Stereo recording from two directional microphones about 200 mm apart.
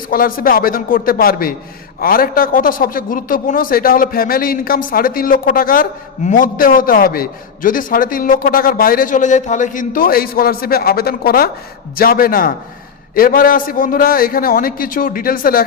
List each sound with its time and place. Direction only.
0.1 s a man's voice: 45° left (ahead or behind)